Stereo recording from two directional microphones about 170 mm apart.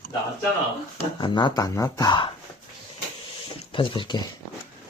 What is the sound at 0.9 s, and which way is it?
Speech, 25° left (ahead or behind).